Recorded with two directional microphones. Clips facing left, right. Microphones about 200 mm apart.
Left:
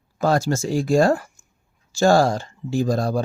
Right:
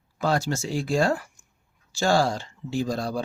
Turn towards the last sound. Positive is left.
turn(degrees=45)  # may be behind; listen again after turning